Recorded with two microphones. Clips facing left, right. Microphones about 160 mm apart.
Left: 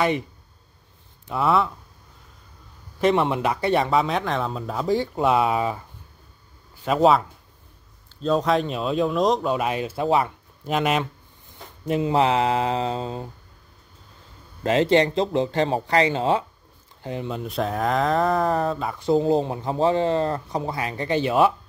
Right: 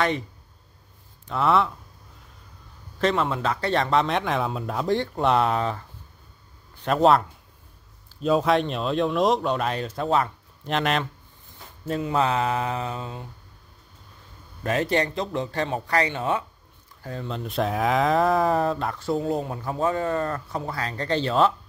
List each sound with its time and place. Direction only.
1.2 s speech: 5° left (ahead or behind)
3.0 s speech: 15° left (ahead or behind)
12.0 s speech: 25° left (ahead or behind)
14.6 s speech: 25° left (ahead or behind)
17.0 s speech: 20° left (ahead or behind)
17.3 s speech: centre (ahead or behind)
18.9 s speech: 25° left (ahead or behind)